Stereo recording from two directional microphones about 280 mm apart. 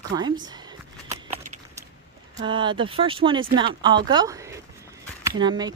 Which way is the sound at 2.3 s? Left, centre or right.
Centre.